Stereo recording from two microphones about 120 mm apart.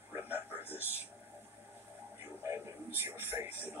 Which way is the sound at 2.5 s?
20° right (ahead or behind).